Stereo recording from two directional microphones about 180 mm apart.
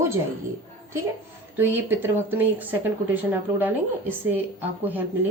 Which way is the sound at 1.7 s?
10° right (ahead or behind).